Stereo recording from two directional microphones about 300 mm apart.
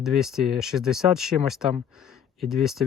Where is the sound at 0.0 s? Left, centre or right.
Centre.